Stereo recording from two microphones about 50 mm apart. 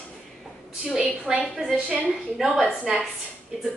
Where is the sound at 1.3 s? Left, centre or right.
Centre.